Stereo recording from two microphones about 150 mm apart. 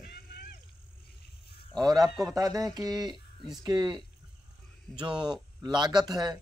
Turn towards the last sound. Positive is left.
turn(degrees=-25)  # may be behind; listen again after turning